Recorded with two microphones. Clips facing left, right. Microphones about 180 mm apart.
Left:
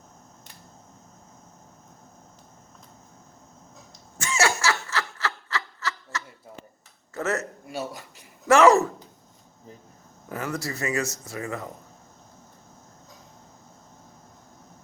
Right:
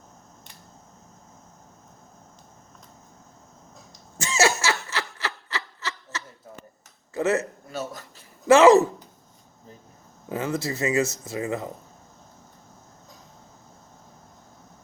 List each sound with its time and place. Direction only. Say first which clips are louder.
4.2 s snicker: right 2 dB; 20° right (ahead or behind)
7.1 s speech: right 4 dB; 15° right (ahead or behind)
7.7 s speech: left 1 dB; 10° left (ahead or behind)
8.4 s speech: right 3 dB; 20° right (ahead or behind)
10.2 s speech: right 4 dB; 20° right (ahead or behind)